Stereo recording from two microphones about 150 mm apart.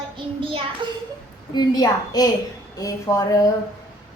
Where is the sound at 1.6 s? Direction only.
25° left (ahead or behind).